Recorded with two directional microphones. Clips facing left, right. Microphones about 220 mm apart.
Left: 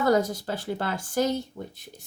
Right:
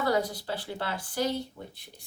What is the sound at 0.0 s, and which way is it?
Speech, 45° left (ahead or behind).